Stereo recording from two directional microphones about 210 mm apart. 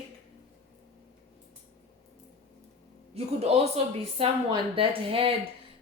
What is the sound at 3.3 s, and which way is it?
Speech, 30° right (ahead or behind).